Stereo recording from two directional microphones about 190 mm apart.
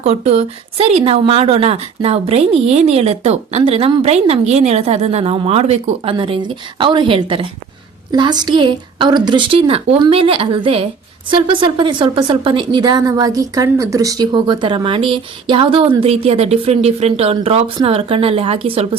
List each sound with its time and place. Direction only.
0.0 s a woman's voice: 35° right (ahead or behind)